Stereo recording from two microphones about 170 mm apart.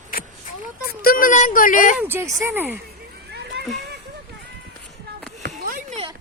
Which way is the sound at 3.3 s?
80° right.